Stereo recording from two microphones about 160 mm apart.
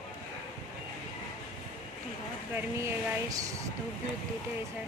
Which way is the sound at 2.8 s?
20° right (ahead or behind).